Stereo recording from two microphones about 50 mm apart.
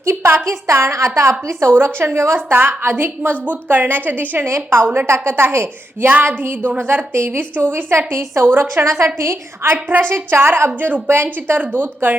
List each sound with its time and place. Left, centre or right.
0.0 s a sound: right
0.4 s a woman's voice: right
1.7 s a woman's voice: right
2.5 s a woman's voice: right
4.4 s a woman's voice: right
10.0 s a woman's voice: right